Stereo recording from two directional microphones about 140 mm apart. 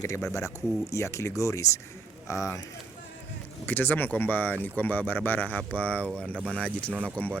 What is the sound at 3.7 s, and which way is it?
Speech, 15° left (ahead or behind).